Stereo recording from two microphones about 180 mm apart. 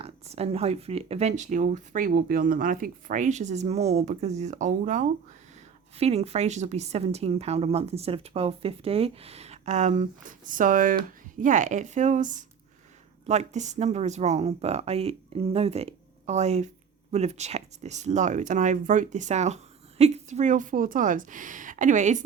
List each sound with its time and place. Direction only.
0.0 s a woman's voice: 35° right (ahead or behind)